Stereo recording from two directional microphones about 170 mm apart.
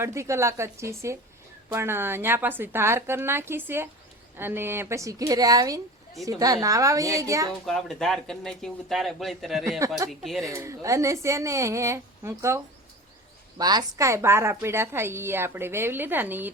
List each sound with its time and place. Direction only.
0.0 s a woman's voice: 15° right (ahead or behind)
7.7 s speech: centre (ahead or behind)
9.6 s a woman's voice: 15° right (ahead or behind)
10.1 s speech: centre (ahead or behind)
10.5 s a woman's voice: 15° right (ahead or behind)